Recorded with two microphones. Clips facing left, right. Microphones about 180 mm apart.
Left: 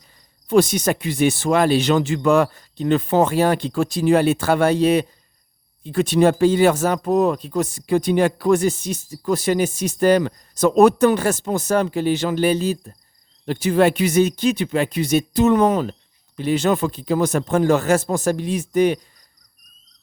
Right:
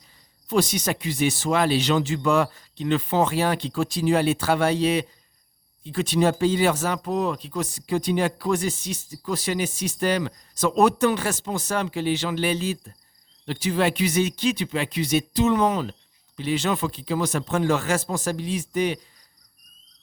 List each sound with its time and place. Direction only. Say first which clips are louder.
0.4 s speech: left 6 dB; 50° left (ahead or behind)